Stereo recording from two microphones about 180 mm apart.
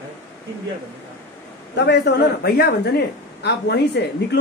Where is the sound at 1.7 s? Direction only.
70° left (ahead or behind).